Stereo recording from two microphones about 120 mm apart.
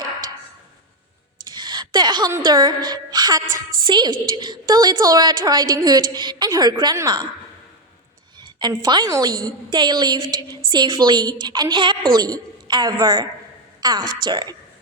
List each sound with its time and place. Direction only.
1.5 s a sound: 40° right (ahead or behind)
2.4 s a woman's voice: 35° right (ahead or behind)
8.5 s a woman's voice: 35° right (ahead or behind)